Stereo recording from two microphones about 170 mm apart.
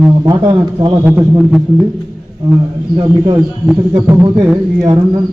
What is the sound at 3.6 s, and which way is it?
Speech, 5° right (ahead or behind).